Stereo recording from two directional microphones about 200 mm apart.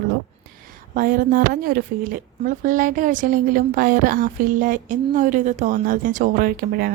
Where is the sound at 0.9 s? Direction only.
45° right (ahead or behind).